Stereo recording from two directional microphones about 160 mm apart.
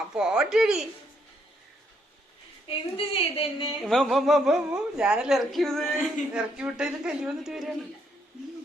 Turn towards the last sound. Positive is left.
turn(degrees=0)  # may be behind; listen again after turning